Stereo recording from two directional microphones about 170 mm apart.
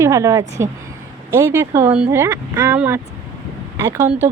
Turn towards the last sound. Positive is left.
turn(degrees=-15)  # may be behind; listen again after turning